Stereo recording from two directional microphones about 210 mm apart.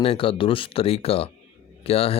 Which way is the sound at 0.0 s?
25° left (ahead or behind).